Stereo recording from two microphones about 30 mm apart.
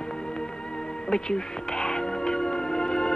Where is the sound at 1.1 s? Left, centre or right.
Left.